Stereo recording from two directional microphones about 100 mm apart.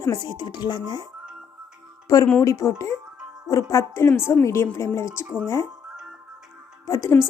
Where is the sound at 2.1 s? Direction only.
35° left (ahead or behind).